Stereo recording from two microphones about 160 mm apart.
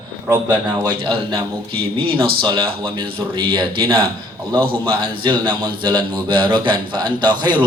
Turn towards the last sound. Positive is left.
turn(degrees=-30)  # may be behind; listen again after turning